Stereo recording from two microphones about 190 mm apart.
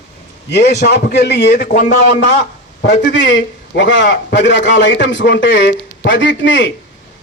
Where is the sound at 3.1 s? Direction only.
70° left (ahead or behind).